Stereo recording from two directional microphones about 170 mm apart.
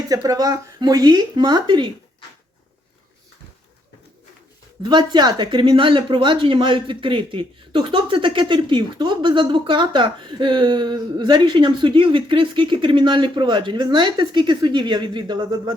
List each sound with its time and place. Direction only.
0.1 s a woman's voice: 20° right (ahead or behind)
4.8 s a woman's voice: 25° right (ahead or behind)